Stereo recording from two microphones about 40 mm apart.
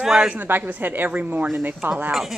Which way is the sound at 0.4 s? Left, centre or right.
Right.